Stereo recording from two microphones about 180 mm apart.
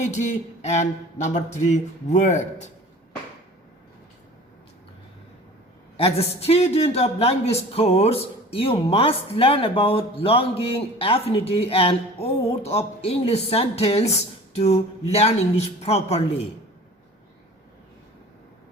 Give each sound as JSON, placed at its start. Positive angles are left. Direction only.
{"t": 0.1, "sound": "speech", "side_deg": 40}
{"t": 6.0, "sound": "speech", "side_deg": 35}